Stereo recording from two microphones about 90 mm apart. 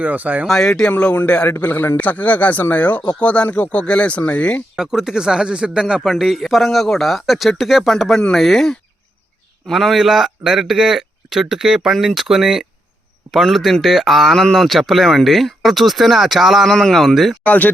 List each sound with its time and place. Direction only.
0.0 s speech: 20° right (ahead or behind)
0.4 s a man's voice: 5° left (ahead or behind)
4.8 s speech: 5° right (ahead or behind)
17.4 s speech: 15° left (ahead or behind)